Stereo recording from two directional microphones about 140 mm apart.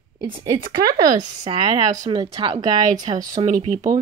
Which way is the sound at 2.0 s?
30° right (ahead or behind).